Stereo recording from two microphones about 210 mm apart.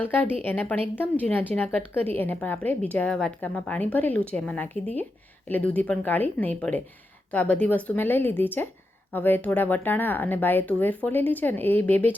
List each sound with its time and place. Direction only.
0.0 s speech: 10° left (ahead or behind)